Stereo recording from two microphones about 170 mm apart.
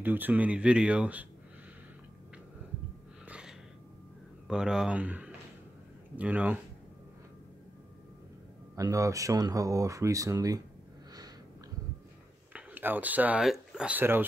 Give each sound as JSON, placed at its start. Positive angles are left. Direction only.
{"t": 0.0, "sound": "speech", "side_deg": -10}
{"t": 3.3, "sound": "gasp", "side_deg": -5}
{"t": 4.5, "sound": "speech", "side_deg": -5}
{"t": 8.7, "sound": "speech", "side_deg": -20}
{"t": 12.5, "sound": "speech", "side_deg": -10}